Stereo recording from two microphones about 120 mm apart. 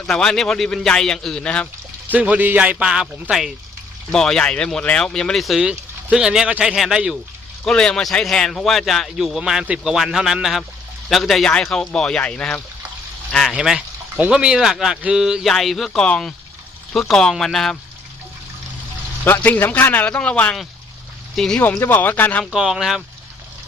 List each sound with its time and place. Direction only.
0.1 s speech: 5° left (ahead or behind)
2.0 s a man's voice: 10° right (ahead or behind); by 12.6 s 10° left (ahead or behind)
13.5 s speech: 5° right (ahead or behind)
19.2 s speech: 15° left (ahead or behind)
21.6 s speech: 15° left (ahead or behind)
22.5 s speech: 5° right (ahead or behind)